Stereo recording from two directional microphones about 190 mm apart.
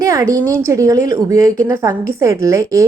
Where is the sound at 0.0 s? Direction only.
15° right (ahead or behind).